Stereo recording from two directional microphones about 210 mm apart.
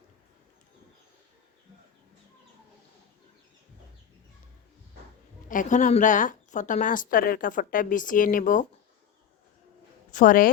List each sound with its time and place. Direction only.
5.5 s a woman's voice: 40° left (ahead or behind)
10.1 s a woman's voice: 40° left (ahead or behind)